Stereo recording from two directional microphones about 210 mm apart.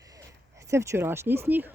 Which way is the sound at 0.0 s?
15° right (ahead or behind).